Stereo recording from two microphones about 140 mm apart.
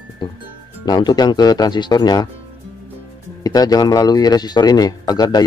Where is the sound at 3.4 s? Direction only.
25° left (ahead or behind).